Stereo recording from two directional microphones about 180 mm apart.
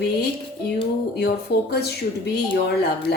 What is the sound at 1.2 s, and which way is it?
Speech, 60° left (ahead or behind).